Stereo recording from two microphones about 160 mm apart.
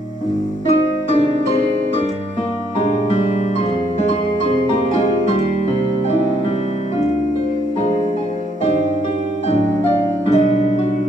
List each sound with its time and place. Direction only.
1.1 s music: 40° left (ahead or behind)
10.2 s music: 40° left (ahead or behind)